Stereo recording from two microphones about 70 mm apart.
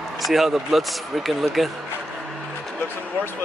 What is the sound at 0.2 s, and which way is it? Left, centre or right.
Speech, centre.